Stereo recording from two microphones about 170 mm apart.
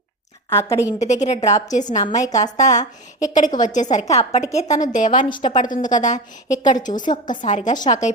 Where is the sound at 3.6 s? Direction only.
45° left (ahead or behind).